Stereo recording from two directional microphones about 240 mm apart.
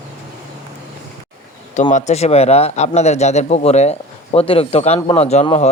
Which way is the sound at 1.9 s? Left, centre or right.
Left.